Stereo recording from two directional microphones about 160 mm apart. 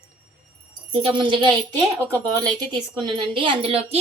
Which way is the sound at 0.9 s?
35° right (ahead or behind).